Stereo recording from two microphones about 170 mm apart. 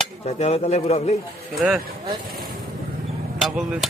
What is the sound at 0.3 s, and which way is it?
Speech, 40° left (ahead or behind).